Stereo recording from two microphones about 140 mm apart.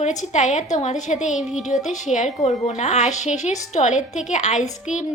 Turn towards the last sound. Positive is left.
turn(degrees=60)  # may be behind; listen again after turning